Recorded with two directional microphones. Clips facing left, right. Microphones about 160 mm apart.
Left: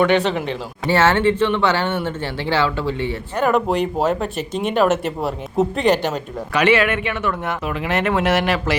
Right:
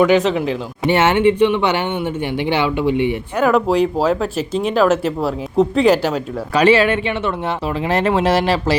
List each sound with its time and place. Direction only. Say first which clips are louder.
0.0 s speech: right 3 dB; 5° right (ahead or behind)
0.9 s speech: right 2 dB; 20° right (ahead or behind)
3.4 s speech: right 3 dB; centre (ahead or behind)
6.5 s speech: right 3 dB; 35° right (ahead or behind)